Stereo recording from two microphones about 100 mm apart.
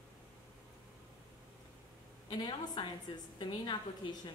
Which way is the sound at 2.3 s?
50° left (ahead or behind).